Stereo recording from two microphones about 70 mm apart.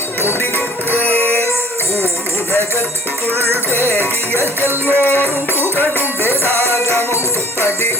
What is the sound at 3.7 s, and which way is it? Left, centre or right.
Music, left.